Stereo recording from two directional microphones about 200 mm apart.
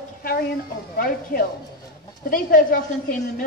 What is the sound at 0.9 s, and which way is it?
Speech, 50° left (ahead or behind).